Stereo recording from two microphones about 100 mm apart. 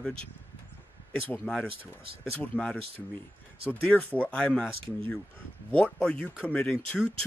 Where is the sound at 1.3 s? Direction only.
10° left (ahead or behind).